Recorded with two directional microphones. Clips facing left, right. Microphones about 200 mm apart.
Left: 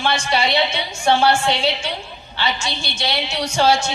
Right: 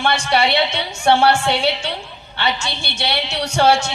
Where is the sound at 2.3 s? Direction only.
65° right (ahead or behind).